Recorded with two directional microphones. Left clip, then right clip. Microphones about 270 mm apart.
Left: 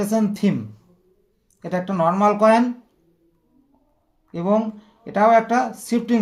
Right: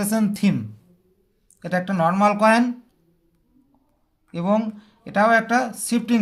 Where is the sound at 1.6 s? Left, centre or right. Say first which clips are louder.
Left 1 dB; right.